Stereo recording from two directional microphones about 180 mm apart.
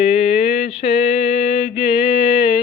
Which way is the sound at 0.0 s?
35° left (ahead or behind).